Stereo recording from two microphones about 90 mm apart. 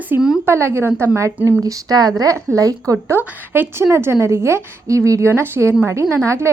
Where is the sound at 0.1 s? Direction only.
25° right (ahead or behind).